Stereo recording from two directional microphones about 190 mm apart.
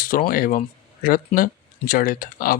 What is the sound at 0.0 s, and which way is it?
Speech, 50° left (ahead or behind).